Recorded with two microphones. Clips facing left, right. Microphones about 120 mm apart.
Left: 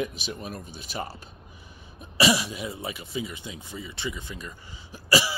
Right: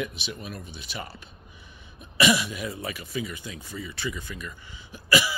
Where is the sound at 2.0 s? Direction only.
30° left (ahead or behind).